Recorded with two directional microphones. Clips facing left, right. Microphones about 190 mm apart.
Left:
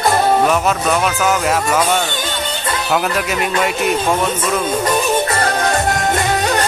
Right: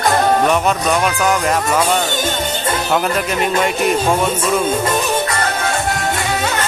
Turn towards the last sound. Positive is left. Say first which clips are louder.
# left 3 dB
turn(degrees=40)  # may be behind; listen again after turning